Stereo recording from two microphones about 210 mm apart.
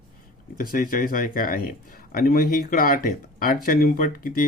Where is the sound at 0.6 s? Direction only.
40° left (ahead or behind).